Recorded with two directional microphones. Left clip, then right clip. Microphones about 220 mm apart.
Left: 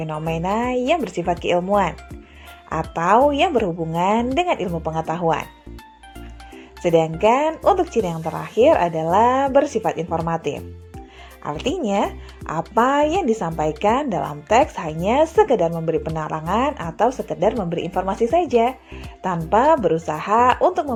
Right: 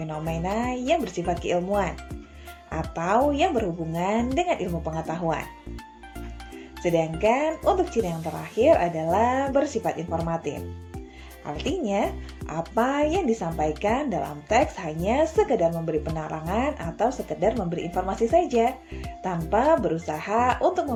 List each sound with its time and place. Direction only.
0.0 s speech: 25° left (ahead or behind)
6.8 s speech: 25° left (ahead or behind)